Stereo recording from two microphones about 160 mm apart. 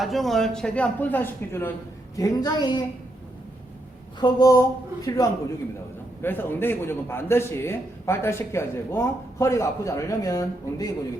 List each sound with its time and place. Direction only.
0.0 s a woman's voice: centre (ahead or behind); by 2.8 s 25° left (ahead or behind)
4.2 s a woman's voice: 25° left (ahead or behind)